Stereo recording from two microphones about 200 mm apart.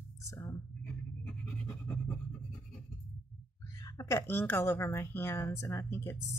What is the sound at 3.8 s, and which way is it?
Speech, 15° left (ahead or behind).